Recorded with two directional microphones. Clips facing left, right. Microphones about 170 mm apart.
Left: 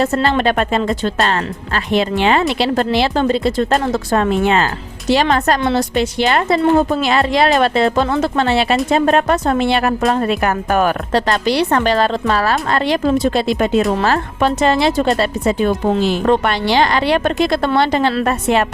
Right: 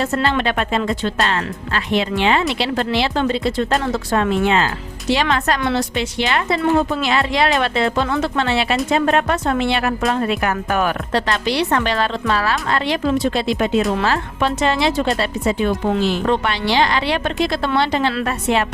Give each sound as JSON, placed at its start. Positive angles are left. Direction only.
{"t": 0.0, "sound": "speech", "side_deg": 40}